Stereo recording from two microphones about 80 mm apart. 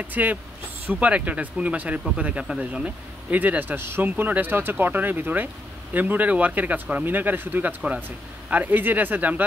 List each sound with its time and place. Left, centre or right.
0.0 s speech: right